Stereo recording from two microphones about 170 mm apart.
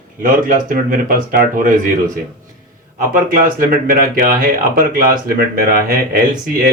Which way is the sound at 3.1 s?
55° right (ahead or behind).